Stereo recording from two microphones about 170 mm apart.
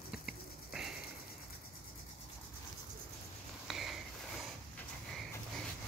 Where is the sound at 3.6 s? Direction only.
Centre (ahead or behind).